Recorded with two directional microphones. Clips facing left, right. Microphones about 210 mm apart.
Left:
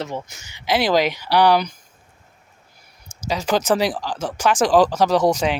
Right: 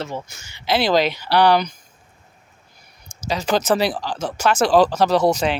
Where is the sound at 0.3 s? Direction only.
15° left (ahead or behind).